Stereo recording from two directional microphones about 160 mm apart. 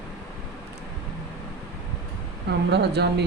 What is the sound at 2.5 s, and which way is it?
Speech, 90° right.